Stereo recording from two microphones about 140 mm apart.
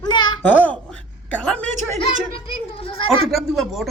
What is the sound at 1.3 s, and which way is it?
Speech, 10° left (ahead or behind).